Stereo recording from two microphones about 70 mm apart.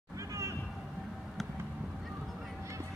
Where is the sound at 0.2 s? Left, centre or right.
Right.